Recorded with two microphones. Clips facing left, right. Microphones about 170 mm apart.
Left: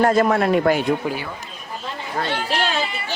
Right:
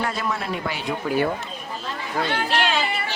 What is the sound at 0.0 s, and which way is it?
Speech, 50° left (ahead or behind).